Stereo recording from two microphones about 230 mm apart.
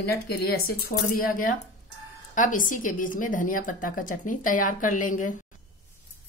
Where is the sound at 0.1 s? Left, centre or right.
Left.